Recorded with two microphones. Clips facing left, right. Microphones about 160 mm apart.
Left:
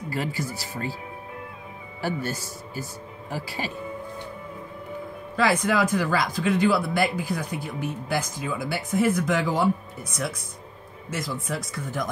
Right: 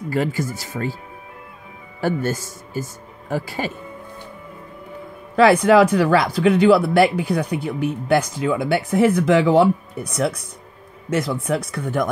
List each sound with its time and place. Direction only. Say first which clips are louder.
0.1 s speech: right 7 dB; 50° right (ahead or behind)
2.0 s speech: right 7 dB; 50° right (ahead or behind)
5.3 s speech: right 10 dB; 65° right (ahead or behind)